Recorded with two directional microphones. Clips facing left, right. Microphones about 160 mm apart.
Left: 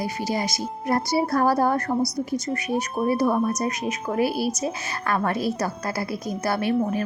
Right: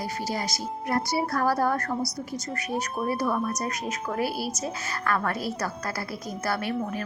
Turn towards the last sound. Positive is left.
turn(degrees=25)  # may be behind; listen again after turning